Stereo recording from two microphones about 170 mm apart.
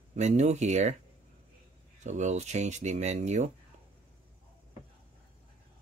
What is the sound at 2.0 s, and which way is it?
Speech, 45° right (ahead or behind).